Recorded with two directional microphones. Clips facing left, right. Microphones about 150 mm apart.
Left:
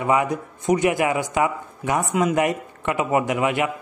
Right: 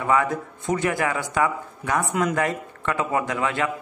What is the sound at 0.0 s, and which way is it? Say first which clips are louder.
A man's voice: left 1 dB; 20° left (ahead or behind).